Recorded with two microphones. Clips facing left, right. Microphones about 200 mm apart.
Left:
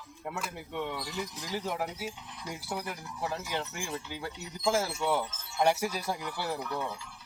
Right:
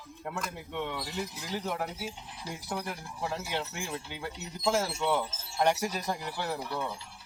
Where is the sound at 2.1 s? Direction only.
30° right (ahead or behind).